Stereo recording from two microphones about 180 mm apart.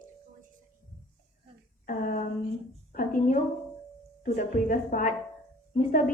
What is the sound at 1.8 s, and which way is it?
Speech, 50° left (ahead or behind).